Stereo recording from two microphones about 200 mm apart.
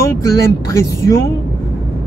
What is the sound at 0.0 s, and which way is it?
Speech, 15° left (ahead or behind).